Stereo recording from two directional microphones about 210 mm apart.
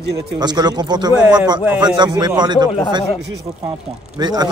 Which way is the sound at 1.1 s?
5° right (ahead or behind).